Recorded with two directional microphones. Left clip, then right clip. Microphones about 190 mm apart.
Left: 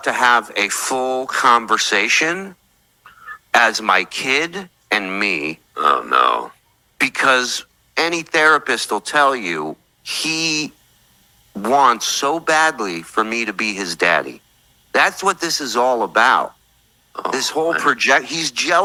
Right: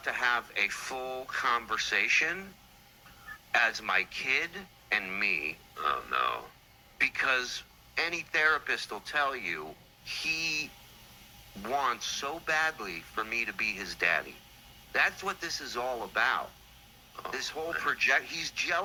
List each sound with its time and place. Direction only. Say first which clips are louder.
0.0 s speech: left 15 dB; 45° left (ahead or behind)
3.5 s speech: left 13 dB; 45° left (ahead or behind)